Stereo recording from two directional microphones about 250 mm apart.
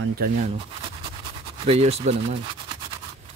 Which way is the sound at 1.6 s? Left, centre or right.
Right.